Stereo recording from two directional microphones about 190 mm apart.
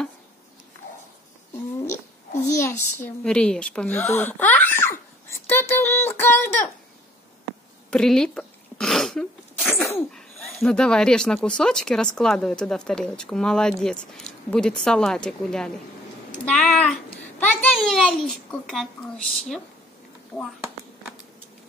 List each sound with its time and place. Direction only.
1.8 s a sound: 15° left (ahead or behind)
3.3 s speech: 5° left (ahead or behind)
7.9 s sneeze: 5° left (ahead or behind)
9.9 s speech: centre (ahead or behind)